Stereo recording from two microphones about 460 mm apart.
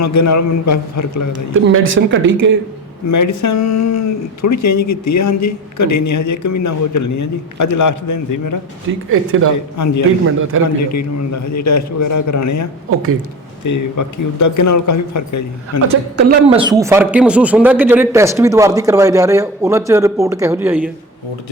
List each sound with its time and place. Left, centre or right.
0.0 s speech: left
1.5 s speech: right
3.1 s speech: left
9.0 s speech: right
9.7 s speech: left
10.5 s speech: right
11.5 s speech: left
13.7 s speech: left
16.5 s speech: centre